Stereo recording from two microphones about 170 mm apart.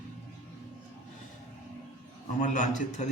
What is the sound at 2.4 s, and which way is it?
Speech, 45° left (ahead or behind).